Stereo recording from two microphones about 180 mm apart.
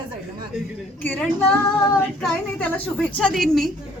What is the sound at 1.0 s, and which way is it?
A woman's voice, 10° left (ahead or behind).